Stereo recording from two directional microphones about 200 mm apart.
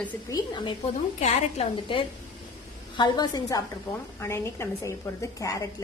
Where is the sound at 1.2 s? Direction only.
30° left (ahead or behind).